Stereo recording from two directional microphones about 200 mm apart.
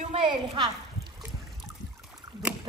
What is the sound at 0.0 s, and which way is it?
Speech, 30° right (ahead or behind).